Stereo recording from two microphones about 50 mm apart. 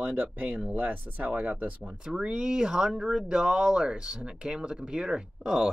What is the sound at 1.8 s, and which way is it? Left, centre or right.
Speech, centre.